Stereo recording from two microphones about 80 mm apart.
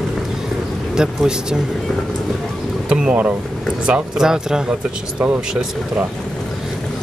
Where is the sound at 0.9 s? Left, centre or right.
Centre.